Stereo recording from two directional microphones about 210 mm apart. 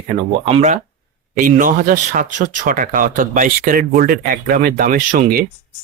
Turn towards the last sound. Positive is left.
turn(degrees=-40)  # may be behind; listen again after turning